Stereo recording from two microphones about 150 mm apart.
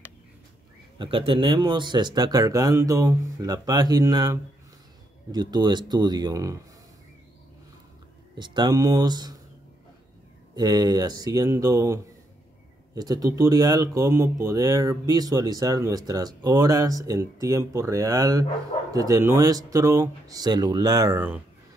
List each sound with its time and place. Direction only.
0.9 s speech: 35° right (ahead or behind)
8.4 s speech: 30° right (ahead or behind)
10.5 s speech: 25° right (ahead or behind)